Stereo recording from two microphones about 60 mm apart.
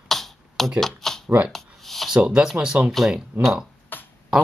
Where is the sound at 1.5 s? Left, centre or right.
Centre.